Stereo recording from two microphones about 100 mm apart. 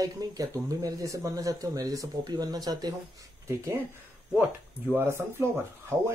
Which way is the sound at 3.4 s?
30° right (ahead or behind).